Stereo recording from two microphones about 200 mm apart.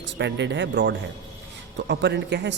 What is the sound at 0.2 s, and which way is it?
Speech, 60° right (ahead or behind).